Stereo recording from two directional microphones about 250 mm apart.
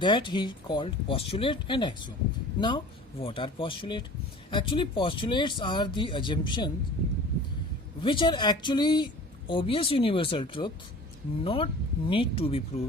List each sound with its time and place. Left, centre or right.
0.0 s speech: centre
8.0 s speech: centre